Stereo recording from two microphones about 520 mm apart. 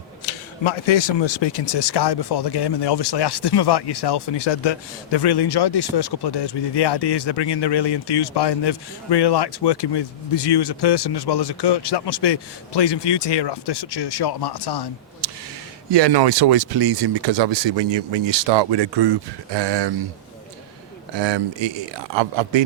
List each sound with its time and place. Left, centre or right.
0.3 s speech: left
15.9 s speech: right
21.1 s speech: right